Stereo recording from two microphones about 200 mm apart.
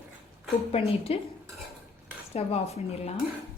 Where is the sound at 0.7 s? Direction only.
30° left (ahead or behind).